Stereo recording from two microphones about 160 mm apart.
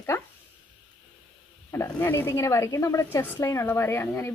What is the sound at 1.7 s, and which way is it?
Speech, 15° left (ahead or behind).